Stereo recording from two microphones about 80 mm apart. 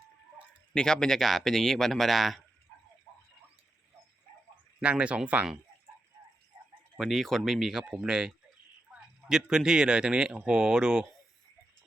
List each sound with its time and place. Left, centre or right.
0.7 s speech: centre
4.8 s speech: centre
6.9 s speech: centre
7.9 s speech: centre
9.3 s speech: centre